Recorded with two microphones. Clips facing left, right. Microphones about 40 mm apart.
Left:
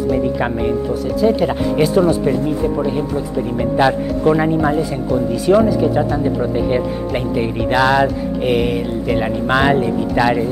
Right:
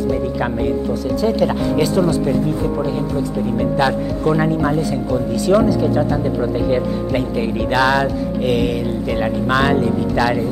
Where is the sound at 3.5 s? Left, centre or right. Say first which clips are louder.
Left 3 dB; centre.